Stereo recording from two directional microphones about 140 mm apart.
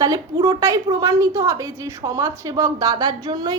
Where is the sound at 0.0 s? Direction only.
25° right (ahead or behind).